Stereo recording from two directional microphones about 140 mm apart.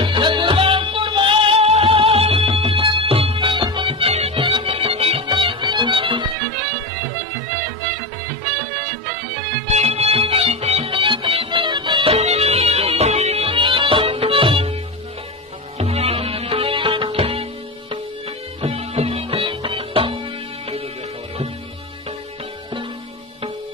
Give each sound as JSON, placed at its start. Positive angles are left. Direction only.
{"t": 0.0, "sound": "music", "side_deg": -35}
{"t": 9.7, "sound": "music", "side_deg": -50}
{"t": 15.8, "sound": "music", "side_deg": -45}
{"t": 18.6, "sound": "music", "side_deg": -45}